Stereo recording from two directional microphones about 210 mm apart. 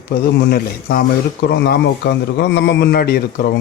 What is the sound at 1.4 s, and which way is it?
A man's voice, 50° left (ahead or behind).